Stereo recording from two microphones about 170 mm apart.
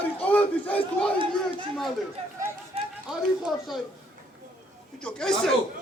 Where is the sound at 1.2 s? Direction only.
30° right (ahead or behind).